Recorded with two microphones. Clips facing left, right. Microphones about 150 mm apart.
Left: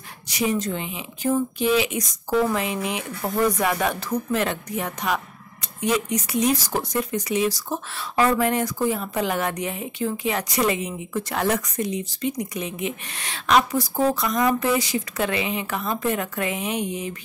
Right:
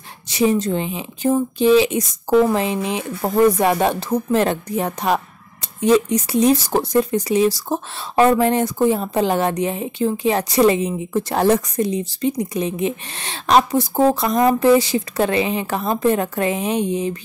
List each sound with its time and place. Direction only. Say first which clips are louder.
0.3 s speech: right 6 dB; 25° right (ahead or behind)